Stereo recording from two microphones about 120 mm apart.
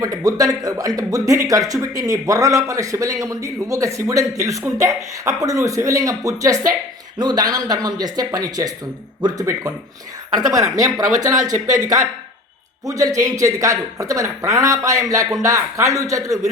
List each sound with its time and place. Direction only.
0.0 s speech: 30° right (ahead or behind)
10.8 s speech: 30° right (ahead or behind)